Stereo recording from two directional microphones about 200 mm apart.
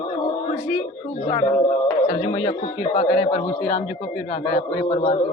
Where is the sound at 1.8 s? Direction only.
25° left (ahead or behind).